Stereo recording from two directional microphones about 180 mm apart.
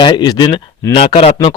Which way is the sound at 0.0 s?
25° left (ahead or behind).